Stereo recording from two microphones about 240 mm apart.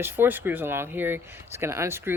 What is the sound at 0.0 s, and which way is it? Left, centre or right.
Speech, centre.